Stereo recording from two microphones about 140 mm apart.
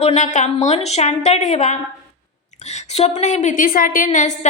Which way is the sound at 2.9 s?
55° left (ahead or behind).